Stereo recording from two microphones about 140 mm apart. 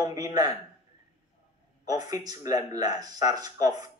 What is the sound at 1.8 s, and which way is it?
Speech, 25° right (ahead or behind).